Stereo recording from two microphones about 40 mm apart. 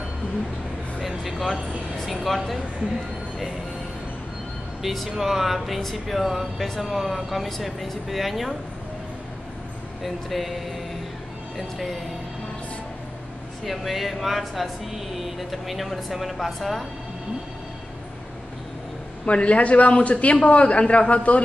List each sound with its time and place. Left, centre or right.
1.0 s speech: centre
4.8 s speech: centre
10.0 s speech: centre
13.7 s speech: centre
19.2 s a man's voice: left